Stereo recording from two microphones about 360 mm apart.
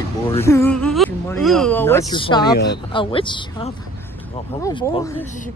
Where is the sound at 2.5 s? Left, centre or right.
Left.